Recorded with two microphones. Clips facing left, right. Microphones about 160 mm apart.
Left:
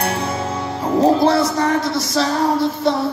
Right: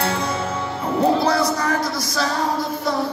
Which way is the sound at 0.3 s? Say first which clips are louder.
Left 2 dB; 35° left (ahead or behind).